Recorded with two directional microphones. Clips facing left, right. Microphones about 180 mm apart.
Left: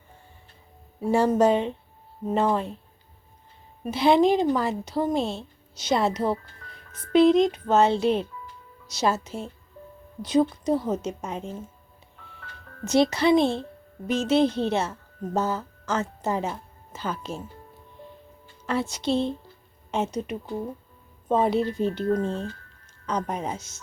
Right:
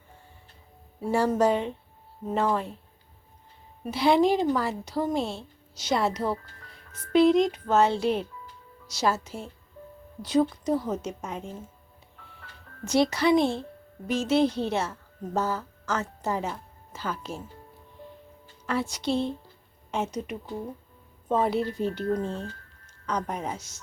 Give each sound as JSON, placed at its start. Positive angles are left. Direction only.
{"t": 1.1, "sound": "speech", "side_deg": 20}
{"t": 3.9, "sound": "speech", "side_deg": 20}
{"t": 12.8, "sound": "speech", "side_deg": 25}
{"t": 18.6, "sound": "speech", "side_deg": 25}